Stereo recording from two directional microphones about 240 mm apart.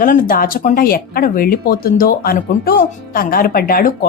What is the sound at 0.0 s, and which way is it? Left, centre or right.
Speech, left.